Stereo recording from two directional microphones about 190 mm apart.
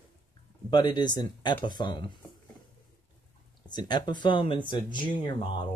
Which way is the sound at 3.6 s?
20° left (ahead or behind).